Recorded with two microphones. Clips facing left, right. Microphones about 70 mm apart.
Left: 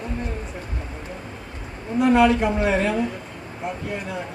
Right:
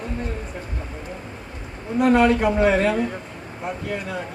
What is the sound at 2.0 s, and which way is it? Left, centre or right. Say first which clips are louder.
Speech: even; right.